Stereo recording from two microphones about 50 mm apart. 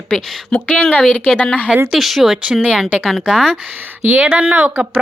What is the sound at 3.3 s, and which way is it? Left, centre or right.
Speech, centre.